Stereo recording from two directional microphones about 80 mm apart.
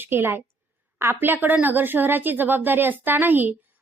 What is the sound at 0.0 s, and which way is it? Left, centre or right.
A woman's voice, right.